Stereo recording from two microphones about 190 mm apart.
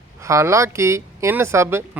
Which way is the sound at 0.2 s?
15° right (ahead or behind).